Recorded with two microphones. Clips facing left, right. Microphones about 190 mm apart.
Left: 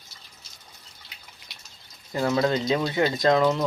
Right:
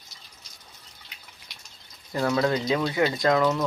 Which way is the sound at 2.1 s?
25° left (ahead or behind).